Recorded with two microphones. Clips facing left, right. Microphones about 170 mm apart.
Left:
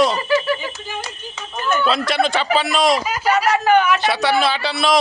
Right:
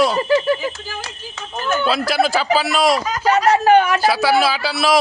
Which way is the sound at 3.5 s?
30° right (ahead or behind).